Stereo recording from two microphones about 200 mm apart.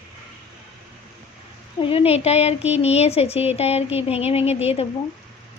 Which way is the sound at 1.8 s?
30° left (ahead or behind).